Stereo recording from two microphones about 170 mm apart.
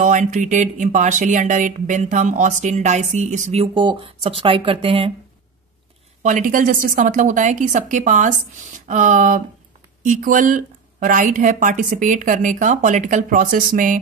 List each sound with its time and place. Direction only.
0.0 s a woman's voice: 45° right (ahead or behind)
3.6 s speech: 30° right (ahead or behind)
6.2 s a woman's voice: 50° right (ahead or behind)